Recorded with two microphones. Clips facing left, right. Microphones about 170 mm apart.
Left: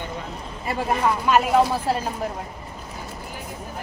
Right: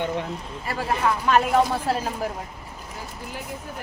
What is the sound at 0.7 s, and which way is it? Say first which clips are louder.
Speech: left 2 dB; 20° left (ahead or behind).